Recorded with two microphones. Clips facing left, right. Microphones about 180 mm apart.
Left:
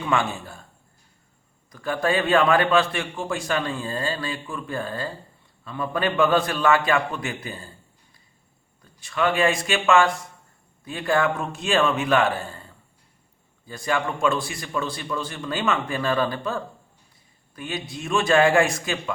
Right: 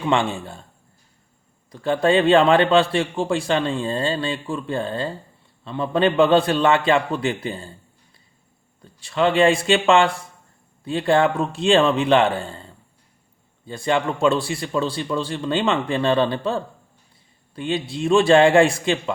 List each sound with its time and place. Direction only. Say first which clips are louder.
0.0 s a man's voice: right 4 dB; 25° right (ahead or behind)
1.7 s a man's voice: right 6 dB; 25° right (ahead or behind)
8.8 s a man's voice: right 4 dB; 30° right (ahead or behind)